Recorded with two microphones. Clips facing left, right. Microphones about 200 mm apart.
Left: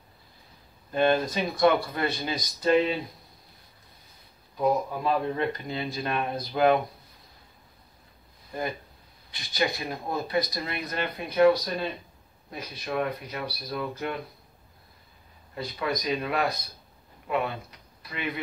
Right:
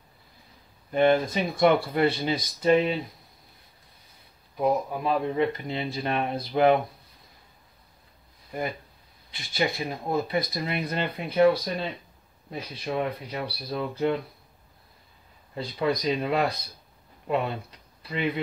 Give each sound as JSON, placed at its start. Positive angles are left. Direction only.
{"t": 0.9, "sound": "speech", "side_deg": -20}
{"t": 4.6, "sound": "speech", "side_deg": -15}
{"t": 9.3, "sound": "speech", "side_deg": -25}
{"t": 15.8, "sound": "speech", "side_deg": -30}